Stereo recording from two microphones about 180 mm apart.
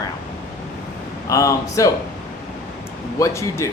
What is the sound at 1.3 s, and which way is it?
Speech, 15° left (ahead or behind).